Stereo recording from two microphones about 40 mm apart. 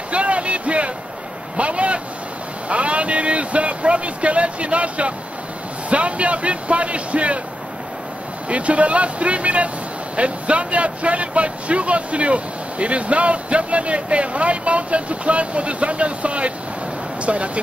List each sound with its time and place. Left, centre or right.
0.1 s a sound: right
1.6 s vehicle: right
2.7 s speech: right
8.5 s speech: right